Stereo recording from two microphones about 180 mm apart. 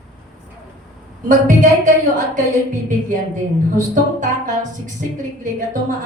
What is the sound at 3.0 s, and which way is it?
A woman's voice, 45° right (ahead or behind).